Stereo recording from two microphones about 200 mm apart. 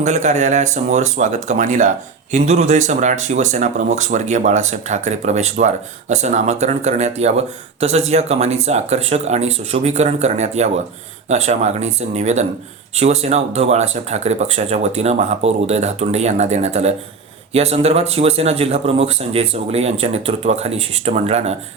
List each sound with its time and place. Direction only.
0.0 s speech: 35° right (ahead or behind)